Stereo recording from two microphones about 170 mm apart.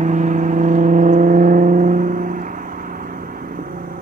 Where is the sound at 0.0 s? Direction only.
45° right (ahead or behind).